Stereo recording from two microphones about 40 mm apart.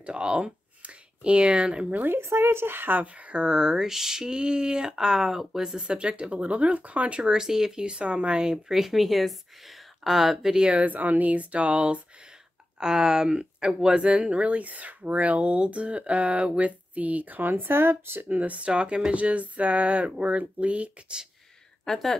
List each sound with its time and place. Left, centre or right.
0.0 s speech: right
2.0 s speech: right
3.0 s speech: right
3.4 s speech: centre
4.4 s speech: right
5.9 s speech: right
7.2 s speech: centre
7.8 s speech: right; by 10.5 s centre
10.5 s speech: right
10.8 s speech: right
12.7 s speech: centre; by 18.2 s right
18.3 s speech: right
18.7 s speech: right
21.8 s speech: centre